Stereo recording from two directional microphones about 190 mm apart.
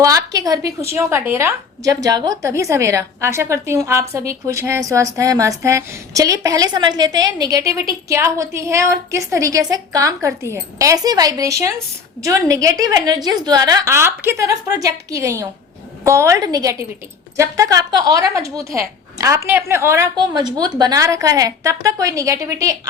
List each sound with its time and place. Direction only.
0.0 s a woman's voice: 15° right (ahead or behind)